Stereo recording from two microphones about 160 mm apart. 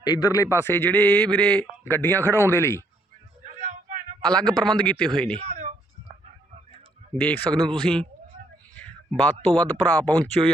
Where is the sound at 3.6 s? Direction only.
50° right (ahead or behind).